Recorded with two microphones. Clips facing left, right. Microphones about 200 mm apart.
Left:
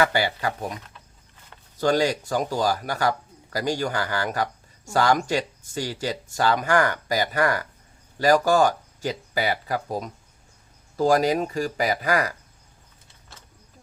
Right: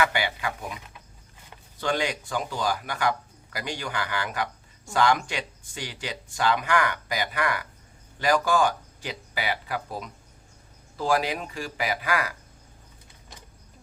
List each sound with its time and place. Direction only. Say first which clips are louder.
0.0 s speech: left 4 dB; 35° left (ahead or behind)
1.8 s speech: left 6 dB; 40° left (ahead or behind)
13.3 s vehicle: right 2 dB; 15° right (ahead or behind)